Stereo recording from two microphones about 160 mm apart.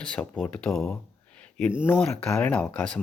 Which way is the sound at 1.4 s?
10° left (ahead or behind).